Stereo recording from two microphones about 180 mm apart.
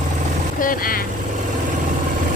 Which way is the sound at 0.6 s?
50° left (ahead or behind).